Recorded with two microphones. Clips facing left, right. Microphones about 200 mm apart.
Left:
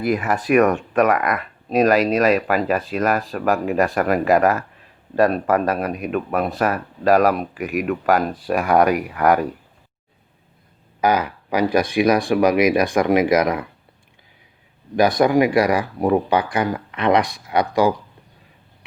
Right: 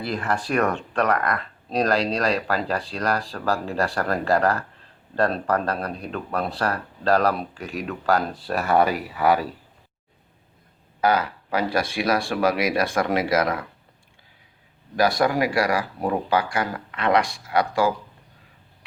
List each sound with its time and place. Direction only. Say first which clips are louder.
0.3 s speech: left 6 dB; 20° left (ahead or behind)
8.6 s speech: left 3 dB; 5° right (ahead or behind)
11.0 s speech: left 2 dB; 15° left (ahead or behind)
14.9 s speech: left 5 dB; 20° left (ahead or behind)